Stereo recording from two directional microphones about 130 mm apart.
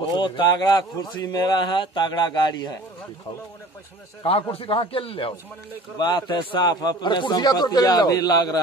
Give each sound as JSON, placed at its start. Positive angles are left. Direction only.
{"t": 0.0, "sound": "a man's voice", "side_deg": 40}
{"t": 4.2, "sound": "a man's voice", "side_deg": 45}
{"t": 5.9, "sound": "a man's voice", "side_deg": 35}